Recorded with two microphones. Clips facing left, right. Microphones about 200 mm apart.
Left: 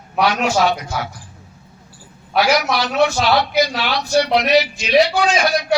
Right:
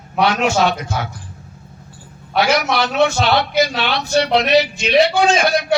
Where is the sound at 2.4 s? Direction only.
25° right (ahead or behind).